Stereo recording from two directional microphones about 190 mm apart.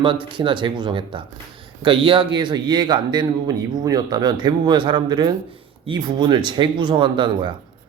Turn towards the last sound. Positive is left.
turn(degrees=-25)  # may be behind; listen again after turning